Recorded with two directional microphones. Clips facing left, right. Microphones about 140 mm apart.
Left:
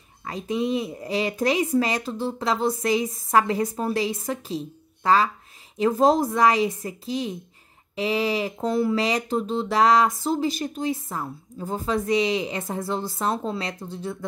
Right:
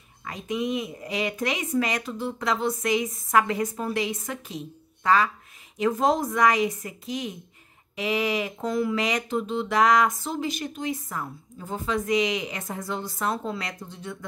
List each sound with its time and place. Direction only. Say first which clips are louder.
0.2 s speech: left 3 dB; 30° left (ahead or behind)